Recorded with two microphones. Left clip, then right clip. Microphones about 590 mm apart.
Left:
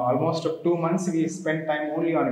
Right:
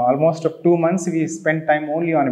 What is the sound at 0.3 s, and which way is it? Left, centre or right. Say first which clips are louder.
Speech: right 7 dB; right.